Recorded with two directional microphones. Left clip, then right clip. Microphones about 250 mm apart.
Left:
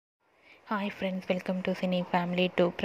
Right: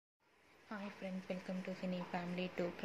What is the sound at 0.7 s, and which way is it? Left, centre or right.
Speech, left.